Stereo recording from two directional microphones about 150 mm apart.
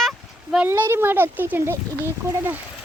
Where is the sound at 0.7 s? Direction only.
15° right (ahead or behind).